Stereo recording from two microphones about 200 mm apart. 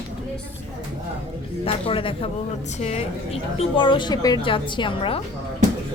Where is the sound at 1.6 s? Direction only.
30° left (ahead or behind).